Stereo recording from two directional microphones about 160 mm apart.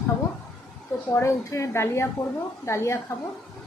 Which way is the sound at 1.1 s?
15° left (ahead or behind).